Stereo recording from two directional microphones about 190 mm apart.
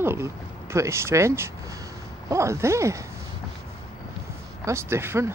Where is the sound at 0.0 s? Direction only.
15° right (ahead or behind).